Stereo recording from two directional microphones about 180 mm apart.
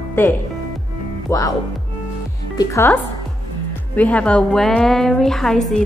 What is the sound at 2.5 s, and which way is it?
A woman's voice, 15° left (ahead or behind).